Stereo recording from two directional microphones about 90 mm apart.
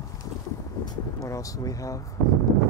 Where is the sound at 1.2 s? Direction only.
40° left (ahead or behind).